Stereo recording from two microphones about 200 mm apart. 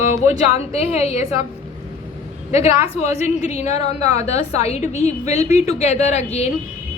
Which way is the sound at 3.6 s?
35° left (ahead or behind).